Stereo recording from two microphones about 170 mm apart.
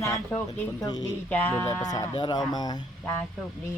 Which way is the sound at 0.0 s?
15° left (ahead or behind).